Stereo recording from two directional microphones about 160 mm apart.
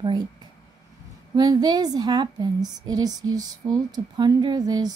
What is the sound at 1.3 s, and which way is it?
Speech, 25° right (ahead or behind).